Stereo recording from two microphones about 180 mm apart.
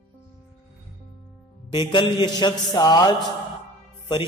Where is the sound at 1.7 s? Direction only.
25° left (ahead or behind).